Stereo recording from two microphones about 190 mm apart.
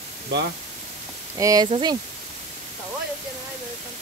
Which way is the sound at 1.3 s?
20° right (ahead or behind).